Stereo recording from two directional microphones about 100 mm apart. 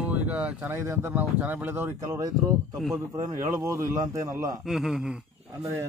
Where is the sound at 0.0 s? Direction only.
15° right (ahead or behind).